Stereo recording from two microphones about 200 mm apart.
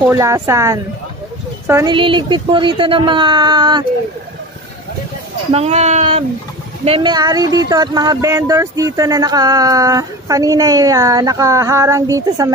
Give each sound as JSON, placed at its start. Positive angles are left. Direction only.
{"t": 0.1, "sound": "speech", "side_deg": -15}
{"t": 2.0, "sound": "speech", "side_deg": -25}
{"t": 5.5, "sound": "speech", "side_deg": -30}